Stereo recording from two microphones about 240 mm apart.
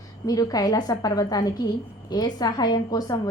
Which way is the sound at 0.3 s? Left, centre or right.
Centre.